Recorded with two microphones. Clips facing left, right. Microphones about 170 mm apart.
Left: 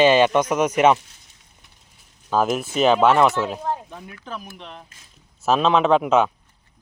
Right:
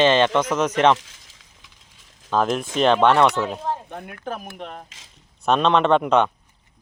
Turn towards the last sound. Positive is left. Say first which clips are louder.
# even
turn(degrees=5)  # may be behind; listen again after turning